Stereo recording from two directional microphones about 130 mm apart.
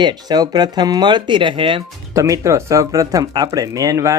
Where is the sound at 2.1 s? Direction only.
25° right (ahead or behind).